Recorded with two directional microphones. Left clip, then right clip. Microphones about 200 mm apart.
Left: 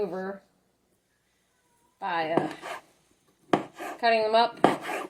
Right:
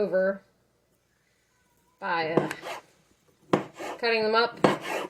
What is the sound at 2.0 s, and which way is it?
Speech, 15° left (ahead or behind).